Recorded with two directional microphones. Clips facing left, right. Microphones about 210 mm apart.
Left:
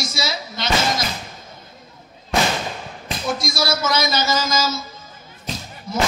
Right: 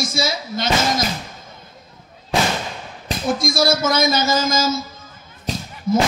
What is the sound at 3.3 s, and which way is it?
Speech, 50° right (ahead or behind).